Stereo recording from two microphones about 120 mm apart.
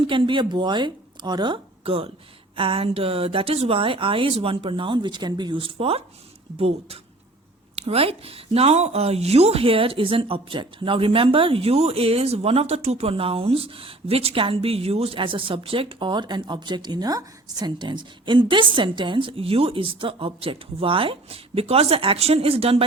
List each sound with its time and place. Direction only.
0.1 s speech: 45° right (ahead or behind)